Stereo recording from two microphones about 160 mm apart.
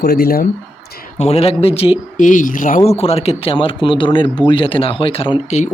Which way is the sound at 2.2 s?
55° left (ahead or behind).